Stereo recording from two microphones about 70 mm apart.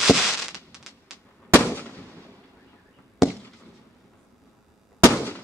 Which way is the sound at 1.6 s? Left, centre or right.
Left.